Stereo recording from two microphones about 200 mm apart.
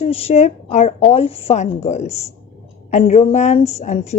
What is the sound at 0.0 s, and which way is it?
A woman's voice, 30° left (ahead or behind).